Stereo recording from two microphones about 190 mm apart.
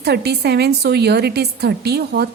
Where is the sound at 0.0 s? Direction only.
60° right (ahead or behind).